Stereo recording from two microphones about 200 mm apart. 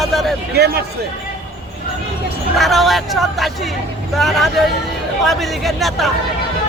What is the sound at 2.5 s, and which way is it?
Speech, centre (ahead or behind).